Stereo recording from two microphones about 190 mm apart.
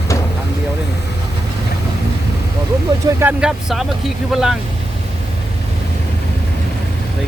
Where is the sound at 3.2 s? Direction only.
5° right (ahead or behind).